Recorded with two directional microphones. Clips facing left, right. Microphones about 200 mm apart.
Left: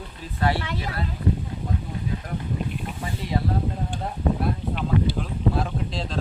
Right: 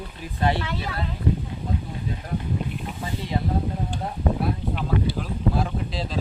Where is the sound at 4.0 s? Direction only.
Centre (ahead or behind).